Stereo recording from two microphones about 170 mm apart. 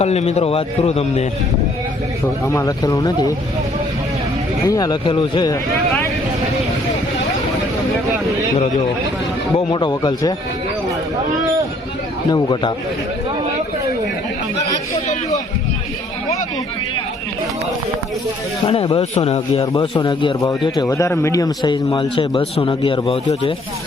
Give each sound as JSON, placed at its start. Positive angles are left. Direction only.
{"t": 0.0, "sound": "a man's voice", "side_deg": 40}
{"t": 2.5, "sound": "a man's voice", "side_deg": 20}
{"t": 4.6, "sound": "a man's voice", "side_deg": 25}
{"t": 9.6, "sound": "a man's voice", "side_deg": 25}
{"t": 12.3, "sound": "a man's voice", "side_deg": 30}
{"t": 18.6, "sound": "a man's voice", "side_deg": 30}